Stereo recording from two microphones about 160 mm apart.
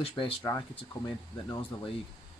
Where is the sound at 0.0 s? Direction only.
30° left (ahead or behind).